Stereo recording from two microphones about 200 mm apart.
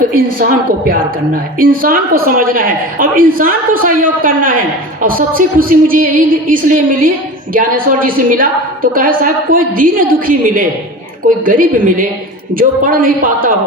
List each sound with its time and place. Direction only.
0.1 s a woman's voice: 45° right (ahead or behind)